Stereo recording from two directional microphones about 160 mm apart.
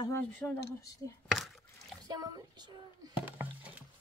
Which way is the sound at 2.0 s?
25° right (ahead or behind).